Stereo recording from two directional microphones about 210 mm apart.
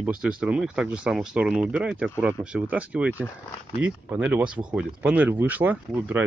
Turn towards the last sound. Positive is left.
turn(degrees=-10)  # may be behind; listen again after turning